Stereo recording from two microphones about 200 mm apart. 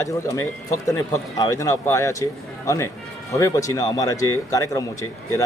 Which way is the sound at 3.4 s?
15° left (ahead or behind).